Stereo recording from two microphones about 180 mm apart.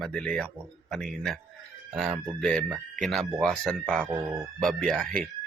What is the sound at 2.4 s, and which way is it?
A man's voice, 5° left (ahead or behind).